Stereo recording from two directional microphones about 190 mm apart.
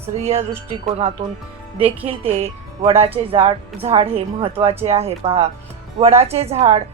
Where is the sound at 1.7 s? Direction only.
30° right (ahead or behind).